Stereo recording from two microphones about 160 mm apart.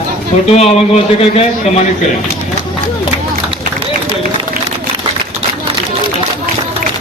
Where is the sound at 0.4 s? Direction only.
40° left (ahead or behind).